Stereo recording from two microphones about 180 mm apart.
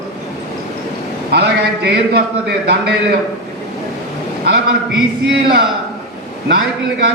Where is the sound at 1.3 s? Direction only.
60° right (ahead or behind).